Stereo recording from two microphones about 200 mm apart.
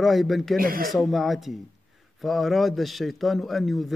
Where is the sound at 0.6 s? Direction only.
45° right (ahead or behind).